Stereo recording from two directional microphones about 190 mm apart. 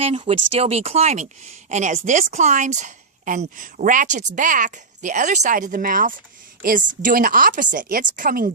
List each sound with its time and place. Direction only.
0.0 s a woman's voice: 30° right (ahead or behind)